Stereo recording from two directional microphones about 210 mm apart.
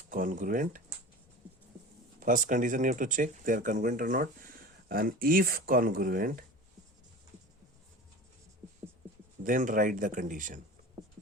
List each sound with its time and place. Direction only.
0.1 s speech: 40° right (ahead or behind)
2.2 s speech: 40° right (ahead or behind)
9.4 s speech: 40° right (ahead or behind)